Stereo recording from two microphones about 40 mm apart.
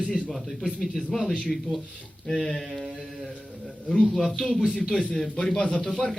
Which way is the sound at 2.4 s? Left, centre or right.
Centre.